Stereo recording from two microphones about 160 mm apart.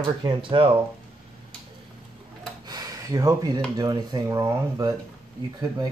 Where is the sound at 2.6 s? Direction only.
25° right (ahead or behind).